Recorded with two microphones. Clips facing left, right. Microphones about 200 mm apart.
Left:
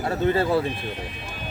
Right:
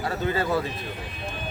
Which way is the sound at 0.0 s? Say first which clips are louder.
Left 4 dB; 30° left (ahead or behind).